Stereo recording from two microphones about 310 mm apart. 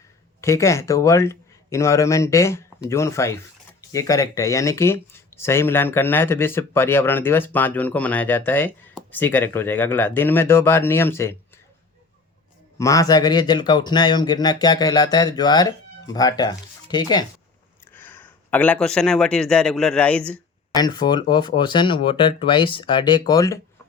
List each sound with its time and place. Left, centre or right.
0.4 s speech: centre
12.8 s speech: centre